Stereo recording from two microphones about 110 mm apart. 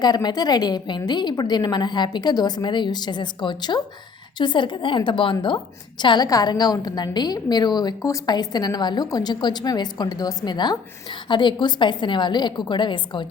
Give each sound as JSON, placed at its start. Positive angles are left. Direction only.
{"t": 0.0, "sound": "a woman's voice", "side_deg": 40}